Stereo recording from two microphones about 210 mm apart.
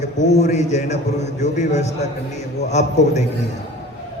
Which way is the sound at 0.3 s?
35° left (ahead or behind).